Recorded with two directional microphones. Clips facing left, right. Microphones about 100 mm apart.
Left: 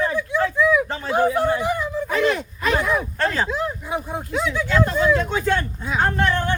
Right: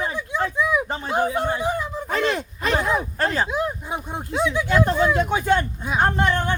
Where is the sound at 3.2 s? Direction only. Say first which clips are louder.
Right 1 dB; 10° right (ahead or behind).